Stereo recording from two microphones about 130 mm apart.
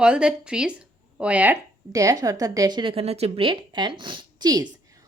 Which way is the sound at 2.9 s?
50° right (ahead or behind).